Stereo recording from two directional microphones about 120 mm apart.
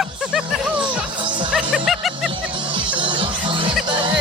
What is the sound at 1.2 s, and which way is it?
Music, 40° right (ahead or behind).